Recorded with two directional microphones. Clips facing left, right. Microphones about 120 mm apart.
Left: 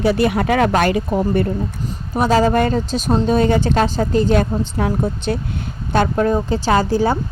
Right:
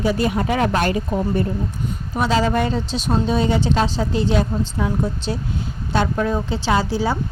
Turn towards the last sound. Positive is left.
turn(degrees=50)  # may be behind; listen again after turning